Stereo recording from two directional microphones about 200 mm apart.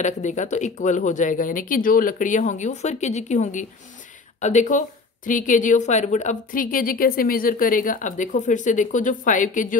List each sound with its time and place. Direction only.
0.0 s speech: 35° left (ahead or behind)